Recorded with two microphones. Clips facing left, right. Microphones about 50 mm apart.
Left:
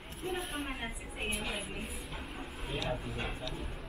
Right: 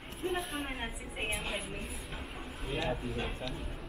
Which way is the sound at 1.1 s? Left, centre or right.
Centre.